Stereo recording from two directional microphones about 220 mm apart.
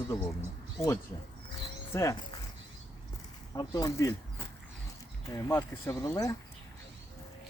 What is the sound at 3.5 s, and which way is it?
Speech, 15° left (ahead or behind).